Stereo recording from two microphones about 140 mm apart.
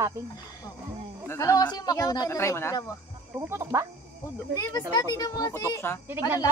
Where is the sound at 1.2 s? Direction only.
20° left (ahead or behind).